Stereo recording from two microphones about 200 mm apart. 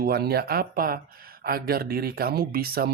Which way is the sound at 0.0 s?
50° right (ahead or behind).